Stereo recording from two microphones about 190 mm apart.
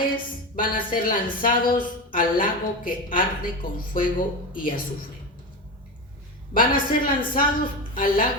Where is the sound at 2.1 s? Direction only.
45° left (ahead or behind).